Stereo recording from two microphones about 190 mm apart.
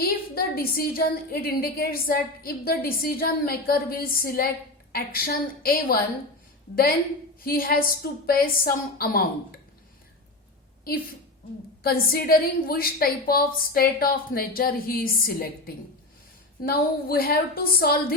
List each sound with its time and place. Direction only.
0.0 s a woman's voice: 50° left (ahead or behind)
7.4 s a woman's voice: 50° left (ahead or behind)
11.8 s a woman's voice: 55° left (ahead or behind)